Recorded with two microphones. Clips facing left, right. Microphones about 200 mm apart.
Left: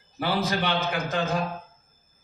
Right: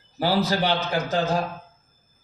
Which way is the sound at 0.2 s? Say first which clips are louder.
Right 4 dB; 35° right (ahead or behind).